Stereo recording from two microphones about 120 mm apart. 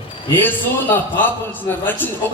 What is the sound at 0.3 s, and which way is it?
A man's voice, 15° left (ahead or behind).